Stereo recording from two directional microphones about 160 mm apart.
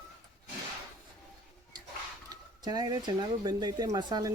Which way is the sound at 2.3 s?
25° right (ahead or behind).